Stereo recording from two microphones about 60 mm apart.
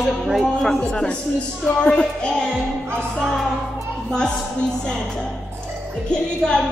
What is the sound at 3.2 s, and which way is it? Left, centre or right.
Speech, centre.